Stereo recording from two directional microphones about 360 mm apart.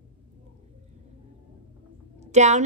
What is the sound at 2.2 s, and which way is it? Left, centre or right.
Speech, centre.